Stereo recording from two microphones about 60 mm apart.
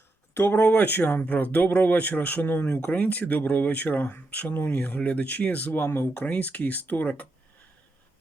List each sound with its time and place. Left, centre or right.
0.3 s speech: left
6.1 s speech: left